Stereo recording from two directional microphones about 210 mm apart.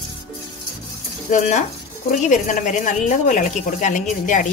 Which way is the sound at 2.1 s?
35° left (ahead or behind).